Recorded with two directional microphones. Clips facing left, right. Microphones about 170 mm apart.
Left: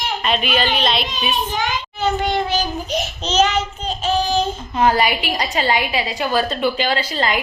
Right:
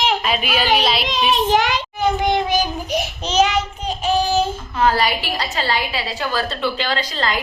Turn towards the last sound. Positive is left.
turn(degrees=15)  # may be behind; listen again after turning